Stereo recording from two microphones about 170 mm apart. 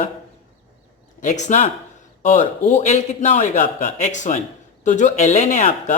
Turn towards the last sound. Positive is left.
turn(degrees=45)  # may be behind; listen again after turning